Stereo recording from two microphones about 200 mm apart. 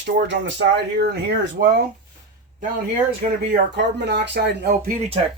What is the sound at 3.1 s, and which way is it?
Speech, 50° right (ahead or behind).